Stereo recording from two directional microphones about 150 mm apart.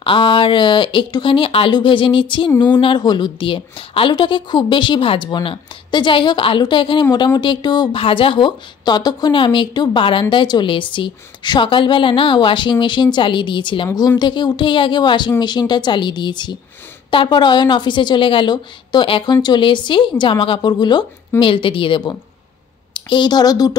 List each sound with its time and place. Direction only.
0.0 s a woman's voice: 35° left (ahead or behind)